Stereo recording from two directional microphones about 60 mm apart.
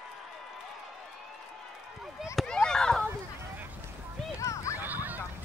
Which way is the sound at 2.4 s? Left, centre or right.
Centre.